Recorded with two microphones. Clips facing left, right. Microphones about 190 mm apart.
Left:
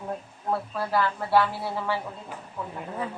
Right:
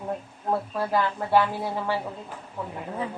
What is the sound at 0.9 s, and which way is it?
Speech, 15° right (ahead or behind).